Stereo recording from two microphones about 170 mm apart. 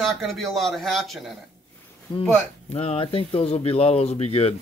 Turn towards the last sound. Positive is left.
turn(degrees=35)  # may be behind; listen again after turning